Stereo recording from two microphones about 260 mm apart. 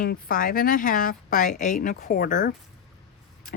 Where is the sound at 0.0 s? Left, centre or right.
Left.